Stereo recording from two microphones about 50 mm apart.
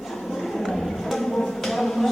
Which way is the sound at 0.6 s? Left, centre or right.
Centre.